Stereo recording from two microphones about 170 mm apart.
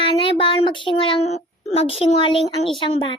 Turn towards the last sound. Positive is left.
turn(degrees=30)  # may be behind; listen again after turning